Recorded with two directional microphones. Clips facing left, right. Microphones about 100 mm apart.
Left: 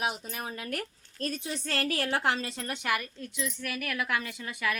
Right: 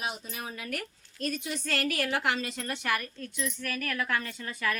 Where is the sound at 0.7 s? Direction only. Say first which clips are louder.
Left 1 dB; 35° left (ahead or behind).